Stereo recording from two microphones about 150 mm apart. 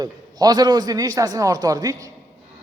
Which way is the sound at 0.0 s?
25° right (ahead or behind).